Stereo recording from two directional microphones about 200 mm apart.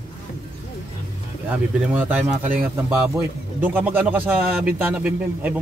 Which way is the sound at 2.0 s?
10° right (ahead or behind).